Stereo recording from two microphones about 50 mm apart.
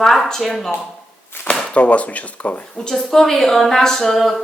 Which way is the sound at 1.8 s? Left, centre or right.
Left.